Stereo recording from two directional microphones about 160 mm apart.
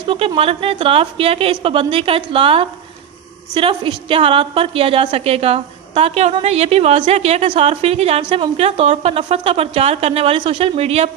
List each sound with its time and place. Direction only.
0.1 s a woman's voice: 35° right (ahead or behind)